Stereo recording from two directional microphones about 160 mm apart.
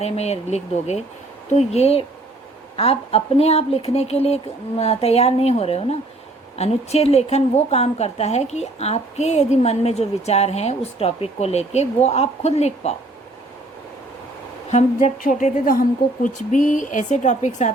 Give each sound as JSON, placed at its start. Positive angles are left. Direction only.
{"t": 0.0, "sound": "a woman's voice", "side_deg": 40}
{"t": 14.7, "sound": "a woman's voice", "side_deg": 50}